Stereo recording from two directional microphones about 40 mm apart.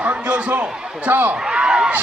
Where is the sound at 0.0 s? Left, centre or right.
Right.